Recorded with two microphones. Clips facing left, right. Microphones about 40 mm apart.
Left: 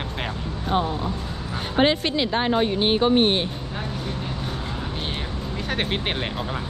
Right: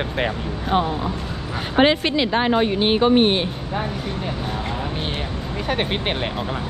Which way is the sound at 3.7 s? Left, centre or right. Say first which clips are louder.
Right 4 dB; right.